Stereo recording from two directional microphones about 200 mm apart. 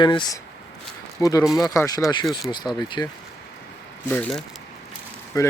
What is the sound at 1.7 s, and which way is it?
Speech, 20° left (ahead or behind).